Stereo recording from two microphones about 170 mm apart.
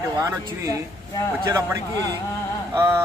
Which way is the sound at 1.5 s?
20° right (ahead or behind).